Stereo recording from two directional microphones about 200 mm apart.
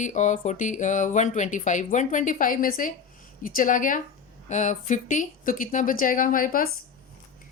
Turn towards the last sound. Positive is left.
turn(degrees=45)  # may be behind; listen again after turning